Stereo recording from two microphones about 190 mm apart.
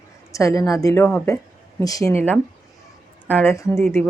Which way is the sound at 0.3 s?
15° left (ahead or behind).